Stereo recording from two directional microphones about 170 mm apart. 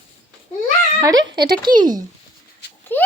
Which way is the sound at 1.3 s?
65° right (ahead or behind).